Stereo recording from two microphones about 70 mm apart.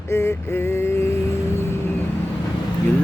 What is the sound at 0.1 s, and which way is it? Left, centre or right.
Speech, left.